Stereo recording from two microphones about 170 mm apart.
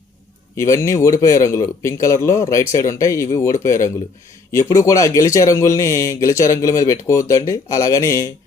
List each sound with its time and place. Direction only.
0.5 s speech: 15° left (ahead or behind)